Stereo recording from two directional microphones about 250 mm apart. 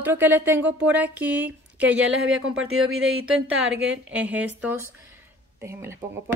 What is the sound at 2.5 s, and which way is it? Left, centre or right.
Speech, right.